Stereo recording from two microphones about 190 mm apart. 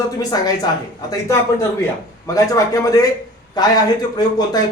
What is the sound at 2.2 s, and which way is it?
A man's voice, 15° left (ahead or behind).